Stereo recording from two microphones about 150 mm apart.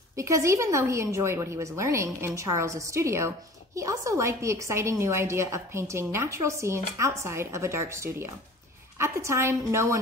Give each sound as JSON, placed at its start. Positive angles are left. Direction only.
{"t": 0.1, "sound": "a woman's voice", "side_deg": -20}